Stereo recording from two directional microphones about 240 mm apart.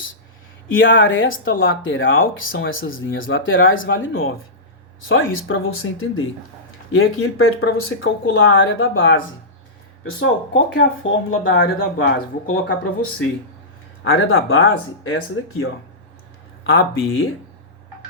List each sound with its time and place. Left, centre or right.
0.7 s speech: left
14.0 s speech: left